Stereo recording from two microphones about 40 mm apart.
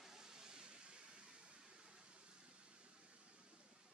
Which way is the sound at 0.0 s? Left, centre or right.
Centre.